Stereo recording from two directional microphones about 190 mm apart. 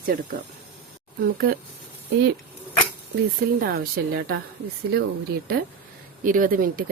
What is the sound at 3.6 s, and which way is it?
Speech, 55° right (ahead or behind).